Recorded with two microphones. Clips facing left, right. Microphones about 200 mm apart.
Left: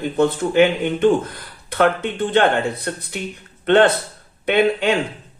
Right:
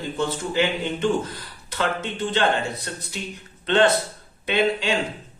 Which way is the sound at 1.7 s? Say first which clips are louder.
Left 8 dB; 55° left (ahead or behind).